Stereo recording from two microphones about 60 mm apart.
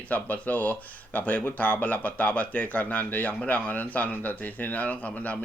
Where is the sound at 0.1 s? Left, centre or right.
Left.